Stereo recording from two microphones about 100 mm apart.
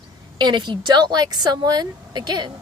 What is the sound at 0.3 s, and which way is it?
Speech, 50° right (ahead or behind).